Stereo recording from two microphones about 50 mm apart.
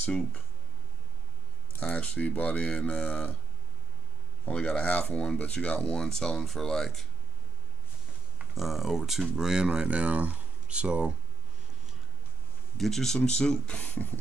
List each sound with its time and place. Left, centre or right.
1.8 s speech: left
4.5 s speech: centre
8.5 s speech: centre; by 11.1 s right
12.7 s speech: centre
13.7 s speech: left